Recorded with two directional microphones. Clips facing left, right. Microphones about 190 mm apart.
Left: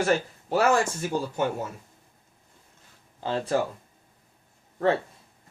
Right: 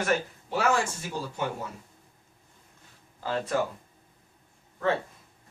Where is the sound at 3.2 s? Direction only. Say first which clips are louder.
Left 3 dB; 25° left (ahead or behind).